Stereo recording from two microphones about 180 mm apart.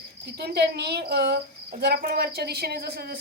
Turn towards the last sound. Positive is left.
turn(degrees=-60)  # may be behind; listen again after turning